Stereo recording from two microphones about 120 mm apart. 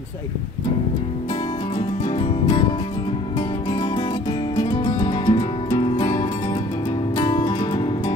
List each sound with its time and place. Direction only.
1.8 s music: 50° left (ahead or behind)
2.4 s music: 40° left (ahead or behind)
7.2 s music: 45° left (ahead or behind)